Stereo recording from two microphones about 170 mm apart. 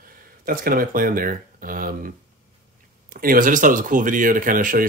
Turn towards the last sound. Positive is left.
turn(degrees=-50)  # may be behind; listen again after turning